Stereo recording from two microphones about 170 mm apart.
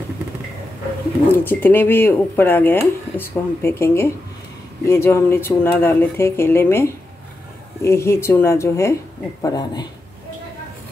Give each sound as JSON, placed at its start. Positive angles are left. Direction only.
{"t": 1.3, "sound": "speech", "side_deg": 10}